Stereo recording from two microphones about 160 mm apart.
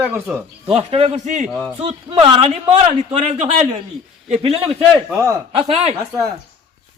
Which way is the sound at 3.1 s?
45° right (ahead or behind).